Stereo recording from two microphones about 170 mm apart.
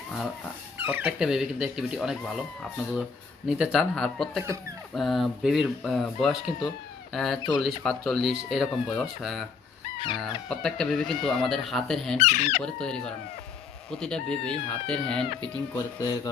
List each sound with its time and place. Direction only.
0.8 s speech: 10° right (ahead or behind)
3.5 s speech: 5° right (ahead or behind)
12.1 s speech: 40° left (ahead or behind)
12.6 s speech: 5° left (ahead or behind)
15.7 s speech: 20° left (ahead or behind)